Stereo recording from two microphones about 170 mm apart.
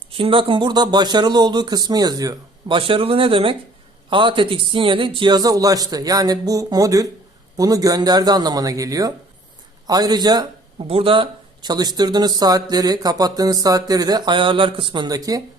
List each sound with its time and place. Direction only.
0.1 s a man's voice: 30° right (ahead or behind)